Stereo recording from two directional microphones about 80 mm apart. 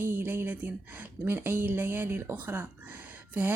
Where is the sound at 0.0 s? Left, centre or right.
Right.